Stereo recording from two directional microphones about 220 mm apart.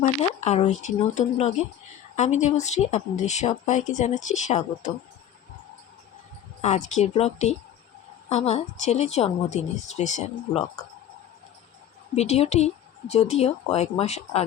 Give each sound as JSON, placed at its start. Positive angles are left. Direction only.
{"t": 0.0, "sound": "speech", "side_deg": 30}
{"t": 6.6, "sound": "speech", "side_deg": 30}
{"t": 12.1, "sound": "speech", "side_deg": 30}